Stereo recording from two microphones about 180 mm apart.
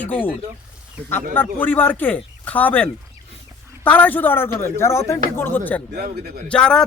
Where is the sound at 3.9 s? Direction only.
10° left (ahead or behind).